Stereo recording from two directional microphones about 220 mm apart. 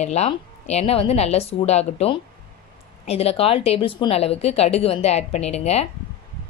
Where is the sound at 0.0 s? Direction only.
30° left (ahead or behind).